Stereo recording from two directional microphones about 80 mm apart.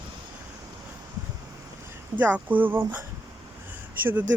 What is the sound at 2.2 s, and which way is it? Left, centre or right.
Speech, centre.